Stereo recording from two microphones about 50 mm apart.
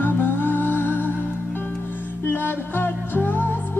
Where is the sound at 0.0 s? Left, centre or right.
Left.